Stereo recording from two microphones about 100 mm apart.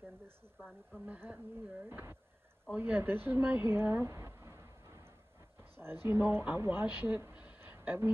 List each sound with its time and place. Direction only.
0.9 s speech: 15° right (ahead or behind)
5.6 s speech: 25° right (ahead or behind)